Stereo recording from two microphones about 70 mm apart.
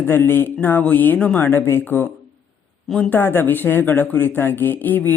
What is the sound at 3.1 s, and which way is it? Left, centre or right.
Speech, left.